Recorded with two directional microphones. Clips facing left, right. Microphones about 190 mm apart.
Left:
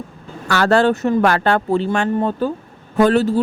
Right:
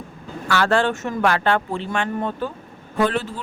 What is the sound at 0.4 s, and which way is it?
Speech, 40° left (ahead or behind).